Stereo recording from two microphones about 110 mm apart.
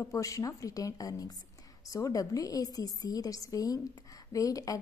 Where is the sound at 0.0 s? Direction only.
30° left (ahead or behind).